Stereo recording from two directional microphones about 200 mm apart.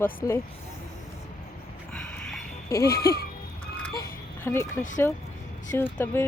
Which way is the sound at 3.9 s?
15° left (ahead or behind).